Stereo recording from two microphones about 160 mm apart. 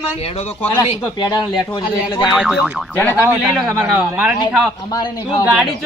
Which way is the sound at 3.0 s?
15° left (ahead or behind).